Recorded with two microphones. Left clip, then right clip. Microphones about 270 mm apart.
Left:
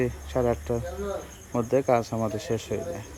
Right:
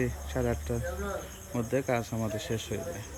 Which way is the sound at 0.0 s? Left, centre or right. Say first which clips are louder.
Left 6 dB; centre.